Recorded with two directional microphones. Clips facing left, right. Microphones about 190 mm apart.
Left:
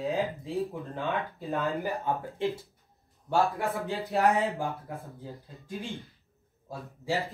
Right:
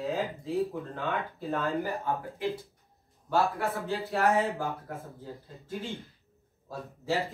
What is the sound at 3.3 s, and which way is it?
Speech, 15° left (ahead or behind).